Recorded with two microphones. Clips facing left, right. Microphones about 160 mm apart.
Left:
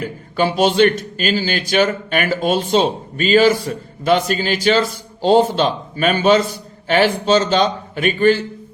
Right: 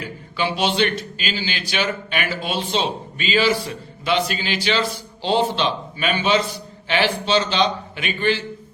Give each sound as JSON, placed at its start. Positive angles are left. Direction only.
{"t": 0.0, "sound": "a man's voice", "side_deg": 45}